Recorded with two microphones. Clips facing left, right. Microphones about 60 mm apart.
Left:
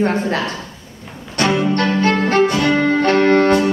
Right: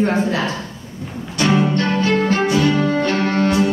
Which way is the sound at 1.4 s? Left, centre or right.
Left.